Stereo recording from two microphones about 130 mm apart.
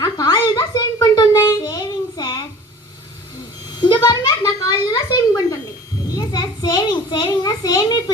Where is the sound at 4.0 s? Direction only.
25° left (ahead or behind).